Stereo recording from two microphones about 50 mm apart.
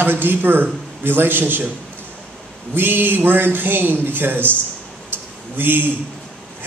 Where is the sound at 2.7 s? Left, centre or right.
Right.